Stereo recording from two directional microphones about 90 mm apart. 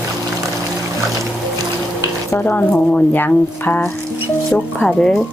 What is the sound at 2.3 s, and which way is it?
Speech, 20° left (ahead or behind).